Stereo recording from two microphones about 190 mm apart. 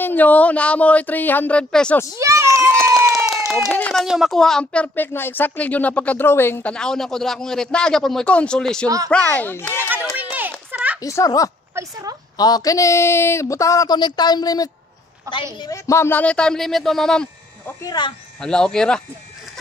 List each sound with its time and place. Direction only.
0.0 s speech: 10° left (ahead or behind)
2.1 s children playing: 15° right (ahead or behind)
2.8 s a sound: 15° right (ahead or behind)
3.7 s speech: 5° left (ahead or behind)
8.8 s speech: 20° right (ahead or behind)
9.1 s speech: 5° left (ahead or behind)
10.7 s a sound: 10° right (ahead or behind)
11.0 s speech: 15° left (ahead or behind)
11.7 s speech: 20° right (ahead or behind)
12.4 s speech: 20° left (ahead or behind)
15.3 s speech: 15° right (ahead or behind)
15.6 s speech: 15° left (ahead or behind)
17.8 s speech: 20° left (ahead or behind)
18.4 s speech: 5° left (ahead or behind)